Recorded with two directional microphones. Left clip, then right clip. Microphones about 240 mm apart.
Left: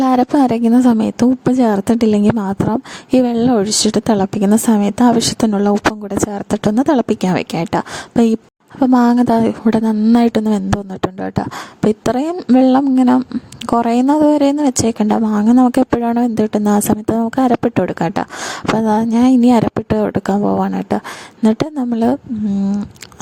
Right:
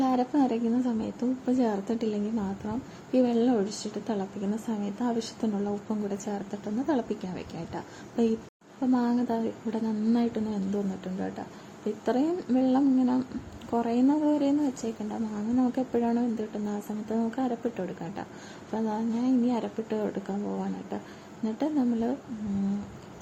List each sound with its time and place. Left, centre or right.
0.0 s a woman's voice: left